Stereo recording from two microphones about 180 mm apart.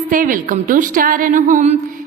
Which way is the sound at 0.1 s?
50° right (ahead or behind).